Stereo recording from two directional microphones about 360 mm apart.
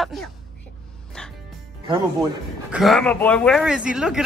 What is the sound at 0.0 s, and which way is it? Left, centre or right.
Speech, centre.